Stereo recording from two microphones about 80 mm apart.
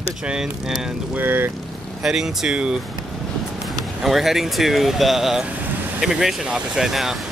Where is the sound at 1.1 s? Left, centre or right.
Right.